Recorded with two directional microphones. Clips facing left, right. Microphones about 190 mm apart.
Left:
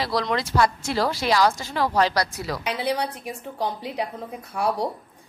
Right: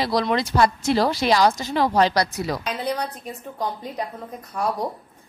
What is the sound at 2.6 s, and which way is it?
Speech, 10° left (ahead or behind).